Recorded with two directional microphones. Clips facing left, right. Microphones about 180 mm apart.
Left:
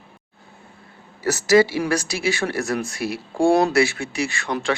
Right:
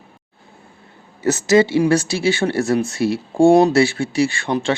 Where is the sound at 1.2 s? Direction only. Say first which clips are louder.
Right 2 dB; 20° right (ahead or behind).